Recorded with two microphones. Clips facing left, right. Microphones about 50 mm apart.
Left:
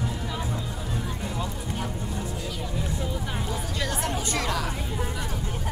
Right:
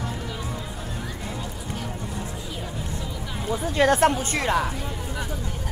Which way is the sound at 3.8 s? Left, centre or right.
Right.